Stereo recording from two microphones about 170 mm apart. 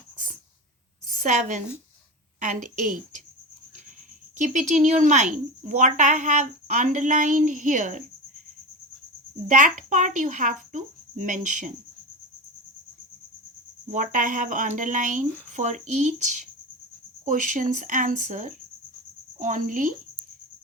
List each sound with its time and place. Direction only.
1.2 s speech: 50° right (ahead or behind)
4.4 s speech: 45° right (ahead or behind)
9.5 s speech: 50° right (ahead or behind)
13.9 s speech: 50° right (ahead or behind)